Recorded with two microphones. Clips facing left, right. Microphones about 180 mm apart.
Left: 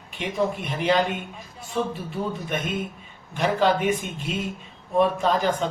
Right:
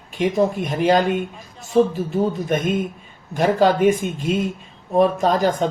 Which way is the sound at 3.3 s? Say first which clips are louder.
Right 5 dB; 45° right (ahead or behind).